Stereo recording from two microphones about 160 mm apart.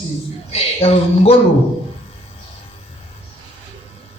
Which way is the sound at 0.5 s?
35° left (ahead or behind).